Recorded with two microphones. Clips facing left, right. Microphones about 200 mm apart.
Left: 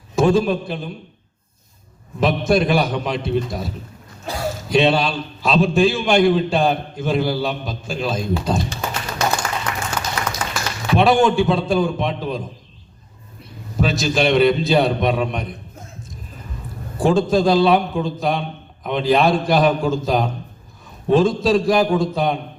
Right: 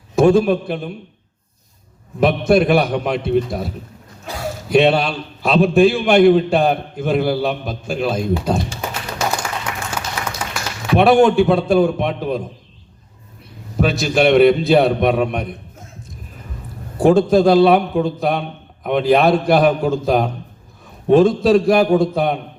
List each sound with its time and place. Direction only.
0.2 s a man's voice: 60° right (ahead or behind)
2.2 s a man's voice: 60° right (ahead or behind)
4.3 s a sound: 35° left (ahead or behind)
4.7 s a man's voice: 55° right (ahead or behind)
9.6 s applause: 10° right (ahead or behind)
10.9 s a man's voice: 60° right (ahead or behind)
13.7 s a man's voice: 60° right (ahead or behind)
17.0 s a man's voice: 60° right (ahead or behind)